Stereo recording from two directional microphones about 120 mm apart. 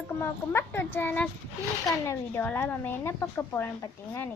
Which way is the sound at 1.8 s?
25° left (ahead or behind).